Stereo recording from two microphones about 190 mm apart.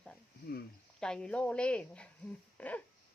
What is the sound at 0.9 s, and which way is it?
Speech, 5° left (ahead or behind).